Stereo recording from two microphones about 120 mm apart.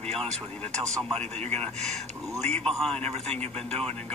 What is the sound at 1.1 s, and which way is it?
Speech, 65° right (ahead or behind).